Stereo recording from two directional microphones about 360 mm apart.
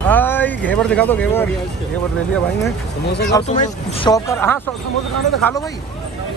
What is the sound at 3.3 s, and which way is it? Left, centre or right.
Speech, centre.